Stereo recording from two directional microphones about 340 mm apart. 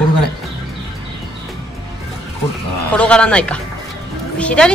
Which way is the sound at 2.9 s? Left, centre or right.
Centre.